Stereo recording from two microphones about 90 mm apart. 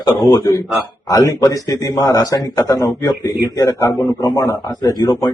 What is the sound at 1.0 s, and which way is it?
A man's voice, 35° left (ahead or behind).